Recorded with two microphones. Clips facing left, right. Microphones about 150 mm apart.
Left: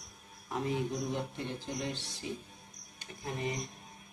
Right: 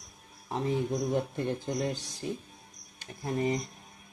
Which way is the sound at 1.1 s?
50° right (ahead or behind).